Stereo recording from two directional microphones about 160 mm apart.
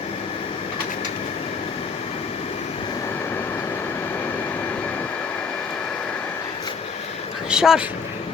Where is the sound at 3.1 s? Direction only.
15° left (ahead or behind).